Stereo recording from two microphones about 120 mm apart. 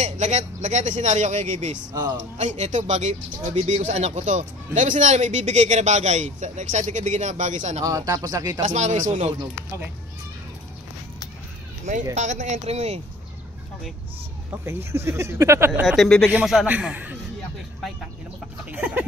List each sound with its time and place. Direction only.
0.0 s speech: 75° right (ahead or behind)
1.9 s speech: 35° right (ahead or behind)
2.3 s speech: 75° right (ahead or behind)
7.8 s speech: 30° right (ahead or behind)
8.6 s speech: 85° right
11.9 s speech: 70° right (ahead or behind)
14.6 s speech: 20° right (ahead or behind)
15.8 s a man's voice: 5° right (ahead or behind)
18.7 s a sound: 10° right (ahead or behind)